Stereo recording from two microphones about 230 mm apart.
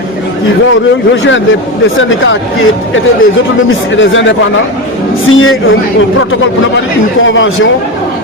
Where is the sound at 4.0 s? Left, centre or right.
Left.